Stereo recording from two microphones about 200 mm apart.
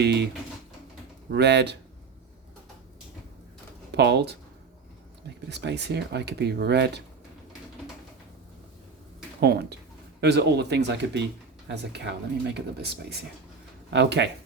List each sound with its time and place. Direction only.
0.0 s speech: 60° right (ahead or behind)
1.3 s speech: 60° right (ahead or behind)
3.9 s speech: 55° right (ahead or behind)
5.5 s speech: 60° right (ahead or behind)
9.4 s speech: 55° right (ahead or behind)